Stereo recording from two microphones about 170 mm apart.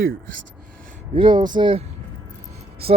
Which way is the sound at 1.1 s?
30° right (ahead or behind).